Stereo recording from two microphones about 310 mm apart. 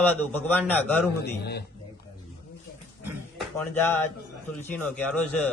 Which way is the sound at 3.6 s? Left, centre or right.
Centre.